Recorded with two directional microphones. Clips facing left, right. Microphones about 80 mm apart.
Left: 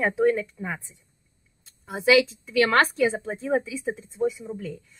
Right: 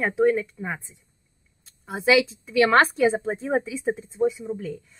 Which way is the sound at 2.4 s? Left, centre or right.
Right.